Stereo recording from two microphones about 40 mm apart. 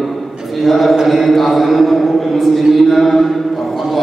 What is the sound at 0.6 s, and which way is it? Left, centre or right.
Mantra, centre.